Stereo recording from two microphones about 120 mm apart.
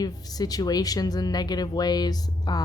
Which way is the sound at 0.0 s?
30° left (ahead or behind).